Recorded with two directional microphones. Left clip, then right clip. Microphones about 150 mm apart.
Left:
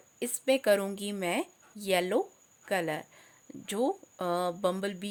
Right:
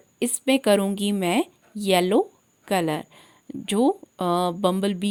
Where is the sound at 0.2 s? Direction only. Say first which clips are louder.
Right 6 dB; 40° right (ahead or behind).